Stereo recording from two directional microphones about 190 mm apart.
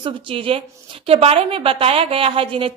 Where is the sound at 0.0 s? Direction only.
30° right (ahead or behind).